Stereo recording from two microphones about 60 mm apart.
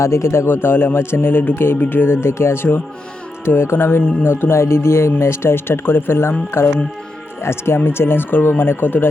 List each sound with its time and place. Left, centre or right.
0.0 s speech: left